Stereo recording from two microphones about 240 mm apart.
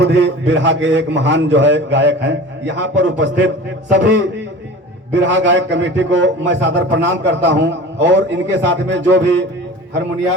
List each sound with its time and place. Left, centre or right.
0.0 s a man's voice: right